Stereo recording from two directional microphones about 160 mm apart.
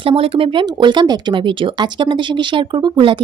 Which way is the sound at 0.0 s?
35° right (ahead or behind).